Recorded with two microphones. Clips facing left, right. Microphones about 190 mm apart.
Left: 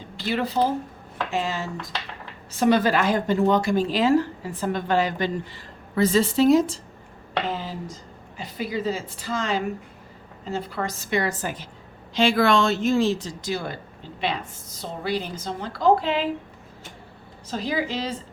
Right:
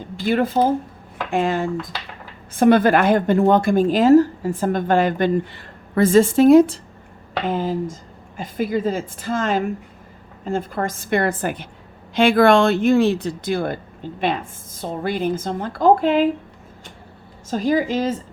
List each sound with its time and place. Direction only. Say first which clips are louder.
0.2 s a woman's voice: right 5 dB; 50° right (ahead or behind)
17.5 s a woman's voice: right 7 dB; 45° right (ahead or behind)